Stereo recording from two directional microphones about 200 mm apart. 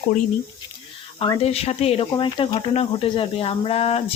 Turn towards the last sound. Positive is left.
turn(degrees=30)  # may be behind; listen again after turning